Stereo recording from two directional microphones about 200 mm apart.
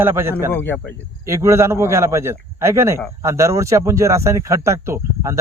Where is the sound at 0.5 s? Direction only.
10° left (ahead or behind).